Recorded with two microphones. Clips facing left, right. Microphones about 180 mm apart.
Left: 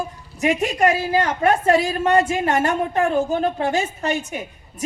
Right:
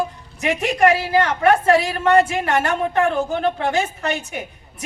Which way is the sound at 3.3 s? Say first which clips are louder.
Even; 70° right (ahead or behind).